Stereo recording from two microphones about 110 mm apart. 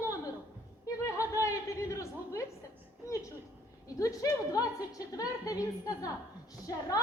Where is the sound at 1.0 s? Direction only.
30° left (ahead or behind).